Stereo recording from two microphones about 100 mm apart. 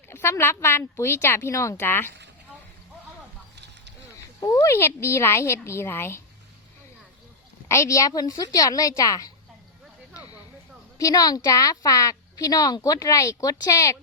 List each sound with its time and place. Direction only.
0.1 s a woman's voice: 25° left (ahead or behind)
4.4 s a woman's voice: 35° left (ahead or behind)
7.7 s a woman's voice: 30° left (ahead or behind)
10.2 s a sound: 40° left (ahead or behind)
11.1 s a woman's voice: 40° left (ahead or behind)